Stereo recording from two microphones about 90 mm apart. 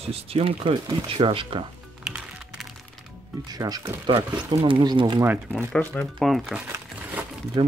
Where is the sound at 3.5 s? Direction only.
45° right (ahead or behind).